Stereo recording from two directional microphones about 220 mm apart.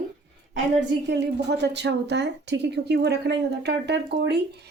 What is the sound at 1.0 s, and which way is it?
Speech, 50° right (ahead or behind).